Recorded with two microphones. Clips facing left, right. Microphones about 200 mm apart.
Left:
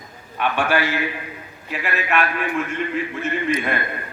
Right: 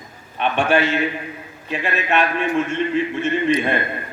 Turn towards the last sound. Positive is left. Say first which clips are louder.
# right 4 dB
turn(degrees=-25)  # may be behind; listen again after turning